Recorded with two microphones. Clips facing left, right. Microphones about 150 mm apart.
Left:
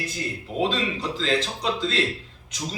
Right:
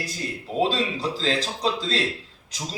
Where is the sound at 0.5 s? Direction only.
35° right (ahead or behind).